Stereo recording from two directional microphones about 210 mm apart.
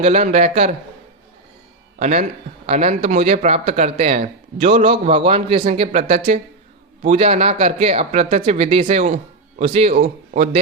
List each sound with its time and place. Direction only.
0.0 s speech: 30° right (ahead or behind)
2.0 s speech: 30° right (ahead or behind)